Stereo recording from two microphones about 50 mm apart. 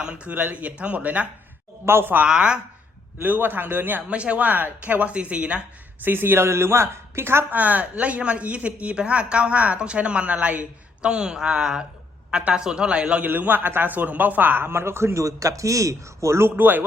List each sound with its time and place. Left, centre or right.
0.0 s speech: centre
0.3 s speech: right
1.8 s a man's voice: right
2.2 s speech: centre
3.2 s a man's voice: right
4.1 s speech: right
6.0 s a woman's voice: right
7.5 s speech: right
13.2 s a man's voice: right
16.5 s a man's voice: right